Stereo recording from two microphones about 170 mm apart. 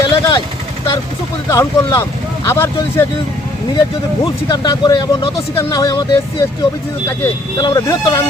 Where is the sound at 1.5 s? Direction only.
20° left (ahead or behind).